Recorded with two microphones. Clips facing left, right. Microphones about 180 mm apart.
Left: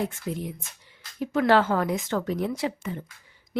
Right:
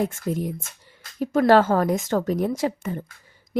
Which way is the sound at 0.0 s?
45° right (ahead or behind).